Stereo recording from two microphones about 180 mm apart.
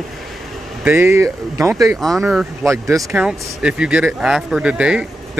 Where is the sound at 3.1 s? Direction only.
5° right (ahead or behind).